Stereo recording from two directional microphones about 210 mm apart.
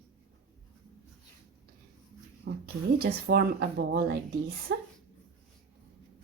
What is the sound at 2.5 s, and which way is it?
A child's voice, 45° right (ahead or behind).